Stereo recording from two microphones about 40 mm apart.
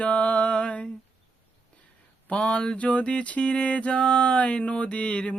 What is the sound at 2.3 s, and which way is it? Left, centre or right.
Mantra, left.